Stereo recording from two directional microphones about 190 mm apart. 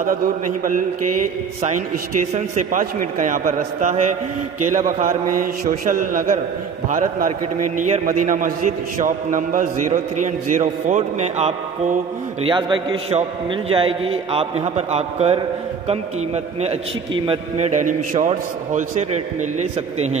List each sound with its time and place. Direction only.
2.3 s a man's voice: 40° right (ahead or behind)
17.3 s a man's voice: 35° right (ahead or behind)